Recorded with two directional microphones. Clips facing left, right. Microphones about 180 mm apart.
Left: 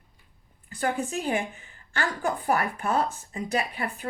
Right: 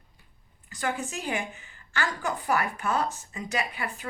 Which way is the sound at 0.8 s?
30° left (ahead or behind).